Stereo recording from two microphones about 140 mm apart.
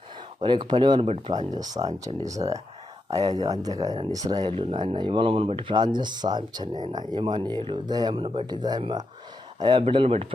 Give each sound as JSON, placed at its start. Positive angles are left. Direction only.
{"t": 0.4, "sound": "speech", "side_deg": -35}
{"t": 9.8, "sound": "speech", "side_deg": -40}